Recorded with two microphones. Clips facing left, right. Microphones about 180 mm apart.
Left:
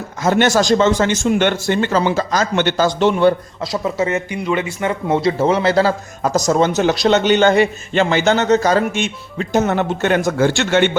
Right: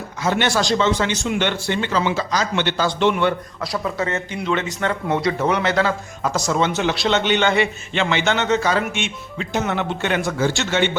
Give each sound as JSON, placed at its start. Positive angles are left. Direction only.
{"t": 0.2, "sound": "a man's voice", "side_deg": 45}
{"t": 3.6, "sound": "speech", "side_deg": 20}
{"t": 5.0, "sound": "speech", "side_deg": 30}
{"t": 10.3, "sound": "a man's voice", "side_deg": 60}